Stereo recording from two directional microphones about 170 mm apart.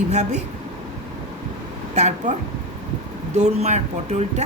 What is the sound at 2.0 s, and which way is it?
Speech, 45° right (ahead or behind).